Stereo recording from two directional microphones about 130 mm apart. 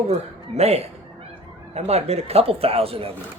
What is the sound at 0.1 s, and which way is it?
Speech, 55° right (ahead or behind).